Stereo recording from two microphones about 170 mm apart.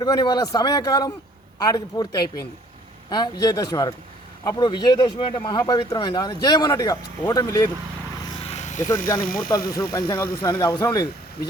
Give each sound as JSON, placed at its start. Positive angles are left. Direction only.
{"t": 0.0, "sound": "speech", "side_deg": 25}
{"t": 8.4, "sound": "electric shaver", "side_deg": 45}
{"t": 9.5, "sound": "speech", "side_deg": 20}